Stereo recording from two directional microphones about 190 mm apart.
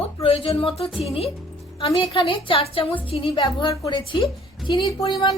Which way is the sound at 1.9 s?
25° left (ahead or behind).